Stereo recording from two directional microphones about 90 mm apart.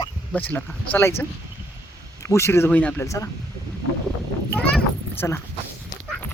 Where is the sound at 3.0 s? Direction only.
35° left (ahead or behind).